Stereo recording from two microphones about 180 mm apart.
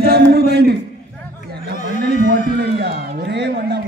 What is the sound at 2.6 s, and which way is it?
A man's voice, 65° right (ahead or behind).